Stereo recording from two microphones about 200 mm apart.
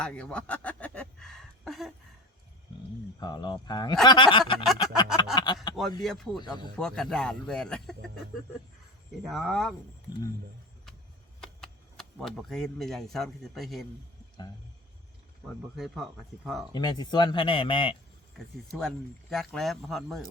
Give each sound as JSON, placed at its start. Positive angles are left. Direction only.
{"t": 0.0, "sound": "speech", "side_deg": 5}
{"t": 3.2, "sound": "speech", "side_deg": 20}
{"t": 4.6, "sound": "music", "side_deg": 0}
{"t": 5.1, "sound": "a sound", "side_deg": 20}
{"t": 6.0, "sound": "speech", "side_deg": 0}
{"t": 6.4, "sound": "speech", "side_deg": 20}
{"t": 6.7, "sound": "speech", "side_deg": 5}
{"t": 9.2, "sound": "speech", "side_deg": 0}
{"t": 11.3, "sound": "speech", "side_deg": 0}
{"t": 15.7, "sound": "speech", "side_deg": 0}
{"t": 16.7, "sound": "speech", "side_deg": 20}
{"t": 18.3, "sound": "speech", "side_deg": 0}